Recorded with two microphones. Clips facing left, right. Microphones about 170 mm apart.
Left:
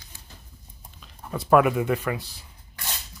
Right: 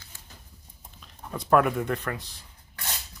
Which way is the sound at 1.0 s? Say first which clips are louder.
Left 3 dB; 5° left (ahead or behind).